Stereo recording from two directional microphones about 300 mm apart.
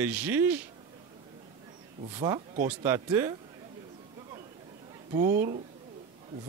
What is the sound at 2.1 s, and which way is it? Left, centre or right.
Speech, centre.